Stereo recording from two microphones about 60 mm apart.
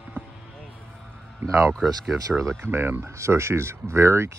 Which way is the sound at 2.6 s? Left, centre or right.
Right.